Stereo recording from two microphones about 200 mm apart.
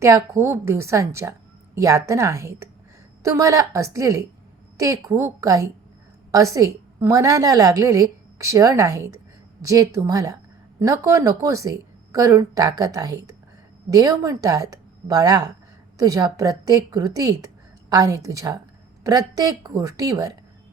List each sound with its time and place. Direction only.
0.0 s a woman's voice: 15° right (ahead or behind)